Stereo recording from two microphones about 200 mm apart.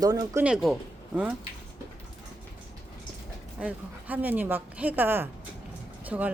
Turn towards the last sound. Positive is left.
turn(degrees=-10)  # may be behind; listen again after turning